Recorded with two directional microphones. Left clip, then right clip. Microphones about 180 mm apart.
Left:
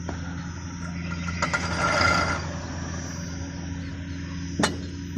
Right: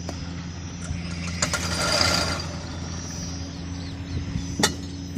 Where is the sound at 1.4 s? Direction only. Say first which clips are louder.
Left 1 dB; 5° left (ahead or behind).